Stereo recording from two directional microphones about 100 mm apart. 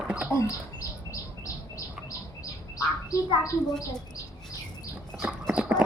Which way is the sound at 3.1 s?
35° left (ahead or behind).